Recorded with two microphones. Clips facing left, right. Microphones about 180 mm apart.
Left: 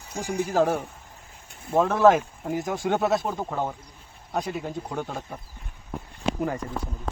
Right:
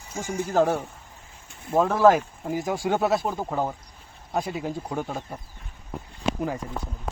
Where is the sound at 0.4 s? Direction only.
Centre (ahead or behind).